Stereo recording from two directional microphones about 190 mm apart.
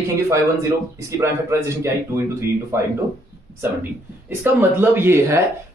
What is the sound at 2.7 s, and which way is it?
Speech, 15° right (ahead or behind).